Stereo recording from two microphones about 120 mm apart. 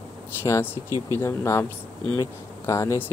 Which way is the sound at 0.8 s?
30° right (ahead or behind).